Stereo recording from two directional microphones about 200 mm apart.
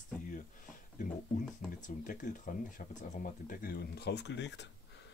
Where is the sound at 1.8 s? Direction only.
40° left (ahead or behind); by 4.7 s 60° left (ahead or behind).